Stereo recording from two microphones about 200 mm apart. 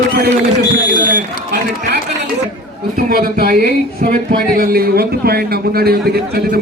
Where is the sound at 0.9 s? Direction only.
40° right (ahead or behind).